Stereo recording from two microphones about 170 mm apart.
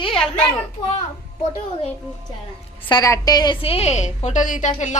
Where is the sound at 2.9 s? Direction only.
20° left (ahead or behind).